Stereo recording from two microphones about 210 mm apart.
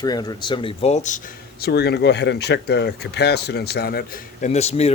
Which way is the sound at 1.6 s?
50° left (ahead or behind).